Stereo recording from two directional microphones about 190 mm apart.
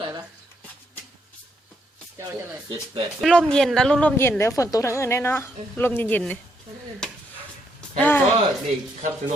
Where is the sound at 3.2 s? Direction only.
Centre (ahead or behind).